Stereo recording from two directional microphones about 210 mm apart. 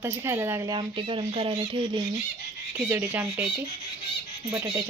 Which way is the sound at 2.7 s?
5° right (ahead or behind).